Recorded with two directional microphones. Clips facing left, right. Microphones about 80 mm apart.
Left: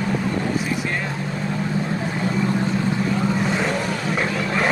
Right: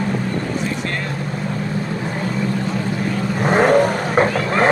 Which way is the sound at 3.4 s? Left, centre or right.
Right.